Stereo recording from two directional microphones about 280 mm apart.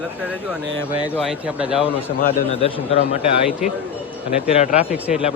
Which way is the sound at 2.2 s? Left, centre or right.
Left.